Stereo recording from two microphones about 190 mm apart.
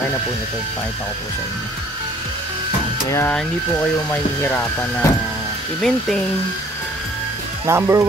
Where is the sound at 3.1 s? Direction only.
10° left (ahead or behind).